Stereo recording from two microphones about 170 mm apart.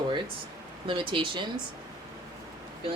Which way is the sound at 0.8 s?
30° right (ahead or behind).